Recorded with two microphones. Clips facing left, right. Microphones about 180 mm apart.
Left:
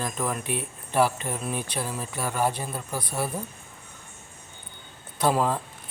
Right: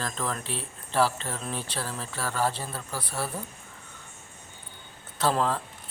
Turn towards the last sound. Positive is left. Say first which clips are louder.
# left 2 dB
turn(degrees=15)  # may be behind; listen again after turning